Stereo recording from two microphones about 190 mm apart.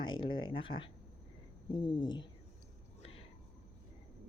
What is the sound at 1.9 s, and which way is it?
Speech, 25° left (ahead or behind).